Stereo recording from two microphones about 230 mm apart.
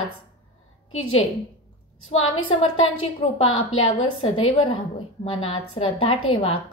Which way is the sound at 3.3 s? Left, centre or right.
Left.